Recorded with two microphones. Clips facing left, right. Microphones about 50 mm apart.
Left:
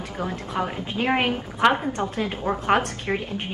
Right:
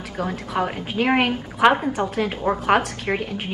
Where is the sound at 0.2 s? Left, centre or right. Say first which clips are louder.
Right 3 dB; right.